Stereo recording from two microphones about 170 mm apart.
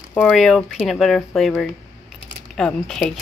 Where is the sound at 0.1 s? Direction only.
5° left (ahead or behind).